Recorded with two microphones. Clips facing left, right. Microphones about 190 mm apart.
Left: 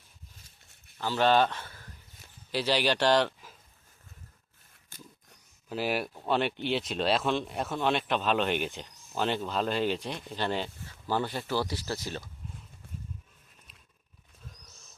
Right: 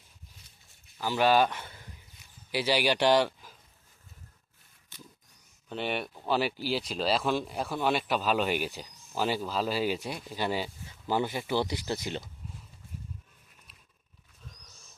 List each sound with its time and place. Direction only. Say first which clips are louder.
0.9 s speech: even; 10° right (ahead or behind)
5.6 s speech: left 2 dB; 5° left (ahead or behind); by 12.2 s 20° right (ahead or behind)